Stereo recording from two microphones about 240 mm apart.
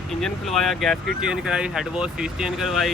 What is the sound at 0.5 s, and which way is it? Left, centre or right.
Speech, centre.